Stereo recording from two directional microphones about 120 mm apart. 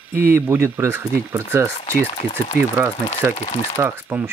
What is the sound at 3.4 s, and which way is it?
Speech, 60° left (ahead or behind).